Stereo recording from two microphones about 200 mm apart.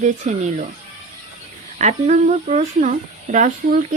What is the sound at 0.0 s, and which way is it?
Speech, 40° right (ahead or behind).